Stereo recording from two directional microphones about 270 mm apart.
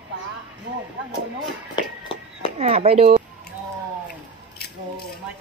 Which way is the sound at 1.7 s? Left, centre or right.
Centre.